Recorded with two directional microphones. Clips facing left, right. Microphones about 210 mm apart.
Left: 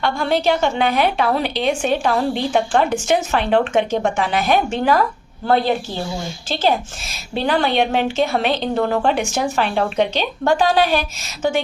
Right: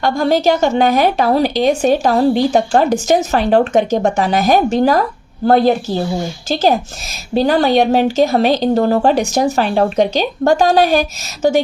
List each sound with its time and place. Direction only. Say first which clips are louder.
0.0 s a woman's voice: right 5 dB; 40° right (ahead or behind)